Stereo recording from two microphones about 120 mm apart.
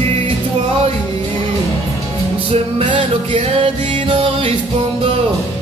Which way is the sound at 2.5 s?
45° right (ahead or behind).